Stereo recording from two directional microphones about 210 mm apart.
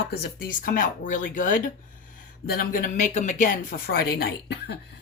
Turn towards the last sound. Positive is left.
turn(degrees=50)  # may be behind; listen again after turning